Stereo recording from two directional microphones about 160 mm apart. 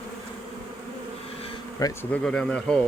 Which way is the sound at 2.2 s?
5° left (ahead or behind).